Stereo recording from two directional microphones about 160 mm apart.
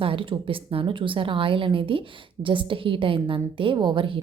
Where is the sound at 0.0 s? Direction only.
35° right (ahead or behind).